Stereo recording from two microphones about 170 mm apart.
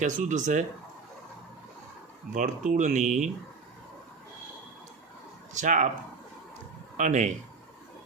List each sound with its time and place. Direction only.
0.0 s speech: 50° right (ahead or behind)
2.3 s speech: 45° right (ahead or behind)
5.5 s speech: 45° right (ahead or behind)
6.9 s speech: 45° right (ahead or behind)